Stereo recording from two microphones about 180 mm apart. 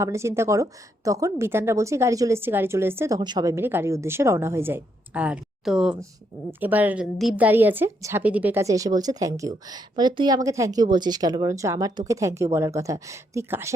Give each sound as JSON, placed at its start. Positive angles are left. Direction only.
{"t": 0.0, "sound": "a woman's voice", "side_deg": -15}